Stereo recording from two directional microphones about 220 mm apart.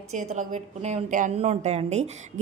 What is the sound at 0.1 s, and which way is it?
A woman's voice, 35° right (ahead or behind).